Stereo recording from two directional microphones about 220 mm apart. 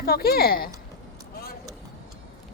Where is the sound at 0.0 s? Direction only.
45° left (ahead or behind).